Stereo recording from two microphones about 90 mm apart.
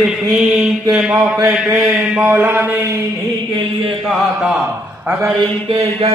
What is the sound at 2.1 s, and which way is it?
Speech, 25° right (ahead or behind).